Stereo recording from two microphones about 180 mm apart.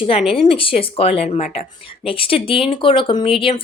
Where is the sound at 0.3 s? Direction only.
30° left (ahead or behind).